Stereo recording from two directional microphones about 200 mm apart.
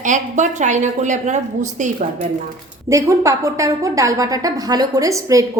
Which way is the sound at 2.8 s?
15° right (ahead or behind).